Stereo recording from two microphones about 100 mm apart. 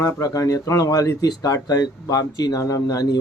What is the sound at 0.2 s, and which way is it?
Speech, 35° left (ahead or behind).